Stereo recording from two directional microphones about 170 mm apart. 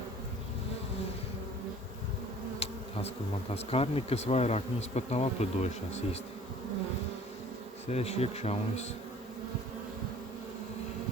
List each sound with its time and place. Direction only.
3.5 s bee: 35° left (ahead or behind)
7.9 s bee: 40° left (ahead or behind)